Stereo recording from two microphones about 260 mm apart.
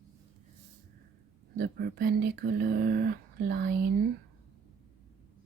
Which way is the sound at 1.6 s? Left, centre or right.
Right.